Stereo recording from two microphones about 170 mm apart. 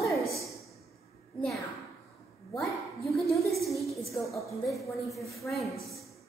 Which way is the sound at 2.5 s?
Centre (ahead or behind).